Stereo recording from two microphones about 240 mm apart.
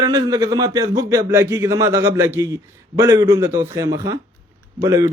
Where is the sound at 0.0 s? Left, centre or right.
Centre.